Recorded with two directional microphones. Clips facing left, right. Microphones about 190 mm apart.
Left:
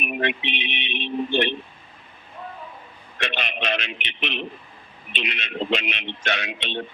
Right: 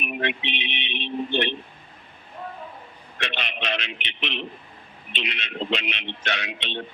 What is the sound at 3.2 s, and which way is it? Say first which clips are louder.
A man's voice: left 3 dB; 50° left (ahead or behind).